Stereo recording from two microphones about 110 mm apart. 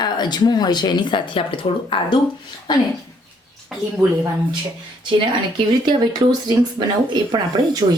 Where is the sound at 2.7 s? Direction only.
40° left (ahead or behind).